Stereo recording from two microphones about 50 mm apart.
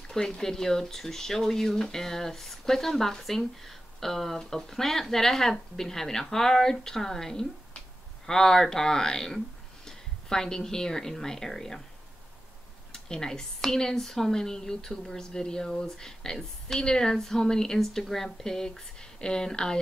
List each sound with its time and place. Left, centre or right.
0.1 s speech: centre
12.9 s speech: centre